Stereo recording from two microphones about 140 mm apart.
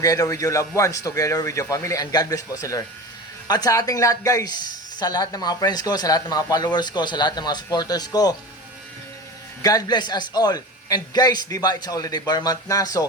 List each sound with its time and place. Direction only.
0.0 s speech: 25° left (ahead or behind)
9.6 s speech: 25° left (ahead or behind)